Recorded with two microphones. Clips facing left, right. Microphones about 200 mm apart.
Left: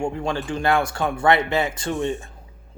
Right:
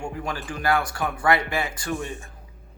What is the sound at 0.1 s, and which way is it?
Speech, 25° left (ahead or behind).